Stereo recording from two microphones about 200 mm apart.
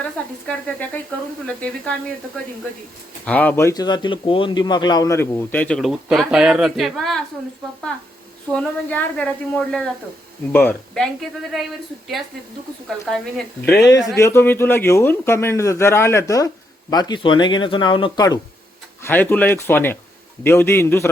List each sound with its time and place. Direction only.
0.0 s speech: 5° left (ahead or behind)
3.2 s speech: 5° left (ahead or behind)
8.5 s speech: 5° left (ahead or behind)
13.1 s speech: 5° left (ahead or behind); by 18.3 s 20° left (ahead or behind)
19.0 s speech: 10° left (ahead or behind)